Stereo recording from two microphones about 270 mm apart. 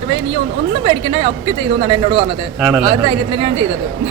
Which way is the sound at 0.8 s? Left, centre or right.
Centre.